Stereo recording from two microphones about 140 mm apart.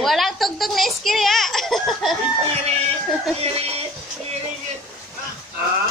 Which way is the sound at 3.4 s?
45° right (ahead or behind).